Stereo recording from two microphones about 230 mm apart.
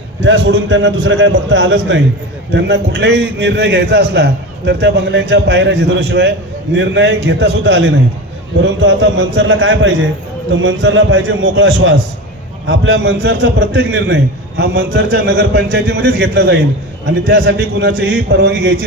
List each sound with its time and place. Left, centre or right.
0.2 s a man's voice: right